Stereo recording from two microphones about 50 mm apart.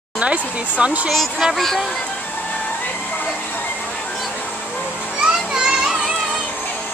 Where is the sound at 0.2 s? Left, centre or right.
Right.